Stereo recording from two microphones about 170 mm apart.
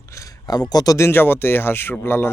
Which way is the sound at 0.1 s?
20° left (ahead or behind).